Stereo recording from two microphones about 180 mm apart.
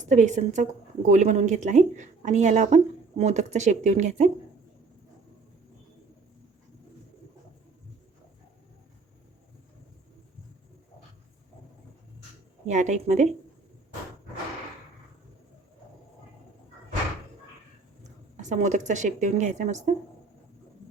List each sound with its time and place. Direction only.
0.0 s a woman's voice: 40° right (ahead or behind)
12.6 s a woman's voice: 40° right (ahead or behind)
18.4 s a woman's voice: 40° right (ahead or behind)